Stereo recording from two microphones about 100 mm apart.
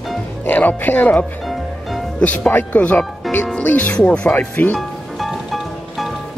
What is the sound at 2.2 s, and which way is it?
Speech, 15° left (ahead or behind).